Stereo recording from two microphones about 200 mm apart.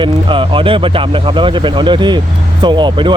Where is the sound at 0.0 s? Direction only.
25° right (ahead or behind).